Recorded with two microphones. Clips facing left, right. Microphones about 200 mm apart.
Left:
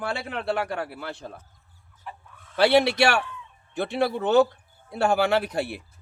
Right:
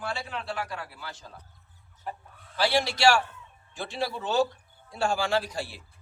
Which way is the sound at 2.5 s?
60° left (ahead or behind).